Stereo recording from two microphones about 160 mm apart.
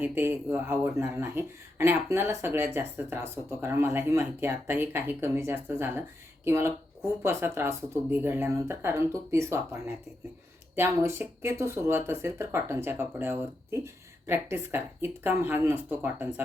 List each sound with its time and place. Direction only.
0.0 s speech: 10° right (ahead or behind)